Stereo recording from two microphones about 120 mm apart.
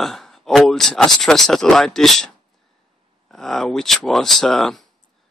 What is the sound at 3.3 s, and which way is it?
Speech, 5° left (ahead or behind).